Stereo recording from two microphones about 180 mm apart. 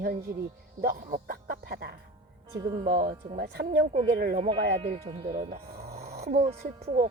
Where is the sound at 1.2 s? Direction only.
55° right (ahead or behind).